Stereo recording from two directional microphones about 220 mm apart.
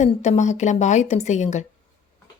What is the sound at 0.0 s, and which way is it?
A woman's voice, 30° left (ahead or behind).